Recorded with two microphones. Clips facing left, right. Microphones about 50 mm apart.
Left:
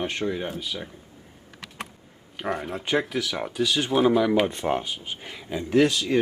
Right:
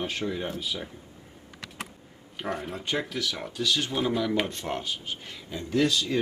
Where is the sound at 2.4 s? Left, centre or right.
Centre; by 6.3 s left.